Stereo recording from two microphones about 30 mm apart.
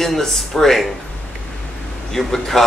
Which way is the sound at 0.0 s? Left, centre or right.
Centre.